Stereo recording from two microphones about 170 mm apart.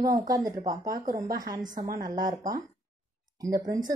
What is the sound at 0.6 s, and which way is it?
Speech, 50° right (ahead or behind).